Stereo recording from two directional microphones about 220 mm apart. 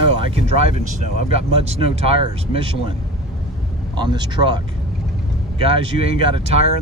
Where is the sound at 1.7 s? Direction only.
25° right (ahead or behind).